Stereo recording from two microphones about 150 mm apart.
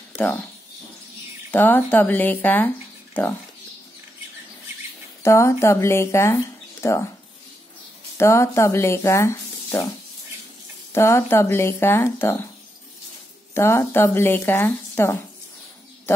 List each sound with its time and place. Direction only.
0.1 s a sound: 10° left (ahead or behind)
1.5 s speech: 10° left (ahead or behind)
5.2 s speech: 20° left (ahead or behind)
8.2 s speech: 20° left (ahead or behind)
10.9 s speech: 15° left (ahead or behind)
13.6 s speech: 15° left (ahead or behind)